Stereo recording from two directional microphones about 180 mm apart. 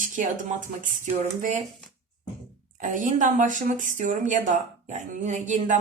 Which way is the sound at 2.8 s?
45° right (ahead or behind).